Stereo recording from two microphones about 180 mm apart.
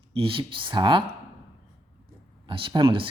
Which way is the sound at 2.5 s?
30° right (ahead or behind).